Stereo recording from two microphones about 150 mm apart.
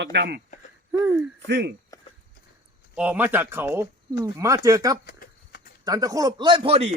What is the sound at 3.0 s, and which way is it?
Speech, 10° right (ahead or behind).